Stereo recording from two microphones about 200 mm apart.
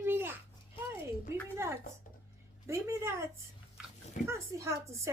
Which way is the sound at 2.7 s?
15° right (ahead or behind).